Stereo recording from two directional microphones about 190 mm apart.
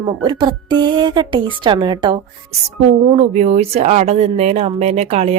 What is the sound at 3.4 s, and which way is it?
Speech, 35° right (ahead or behind).